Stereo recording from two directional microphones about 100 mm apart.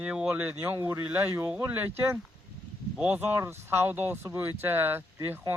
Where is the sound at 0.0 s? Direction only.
10° right (ahead or behind).